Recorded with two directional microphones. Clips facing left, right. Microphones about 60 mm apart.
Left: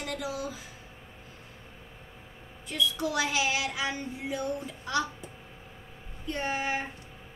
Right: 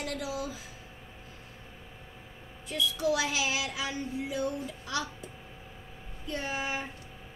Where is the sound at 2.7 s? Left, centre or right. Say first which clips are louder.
Even; left.